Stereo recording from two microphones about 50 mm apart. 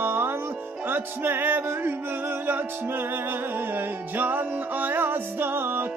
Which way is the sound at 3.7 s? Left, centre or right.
Right.